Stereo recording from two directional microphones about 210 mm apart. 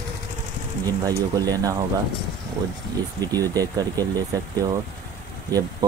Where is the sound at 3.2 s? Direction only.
15° right (ahead or behind).